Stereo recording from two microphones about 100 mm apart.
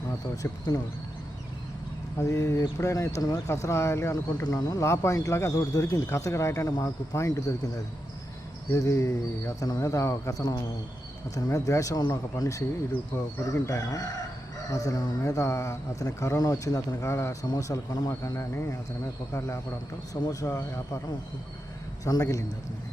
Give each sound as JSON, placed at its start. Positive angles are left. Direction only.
{"t": 2.1, "sound": "speech", "side_deg": 30}
{"t": 4.4, "sound": "speech", "side_deg": 40}
{"t": 8.7, "sound": "speech", "side_deg": 30}
{"t": 22.0, "sound": "speech", "side_deg": 35}